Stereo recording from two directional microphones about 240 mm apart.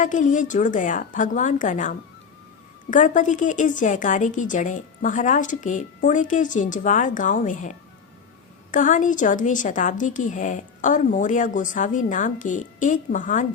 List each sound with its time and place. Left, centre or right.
0.0 s a woman's voice: left